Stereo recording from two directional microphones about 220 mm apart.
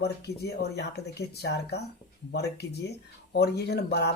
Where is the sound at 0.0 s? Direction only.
50° left (ahead or behind).